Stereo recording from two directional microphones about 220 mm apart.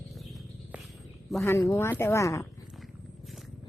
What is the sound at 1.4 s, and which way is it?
Speech, 10° left (ahead or behind).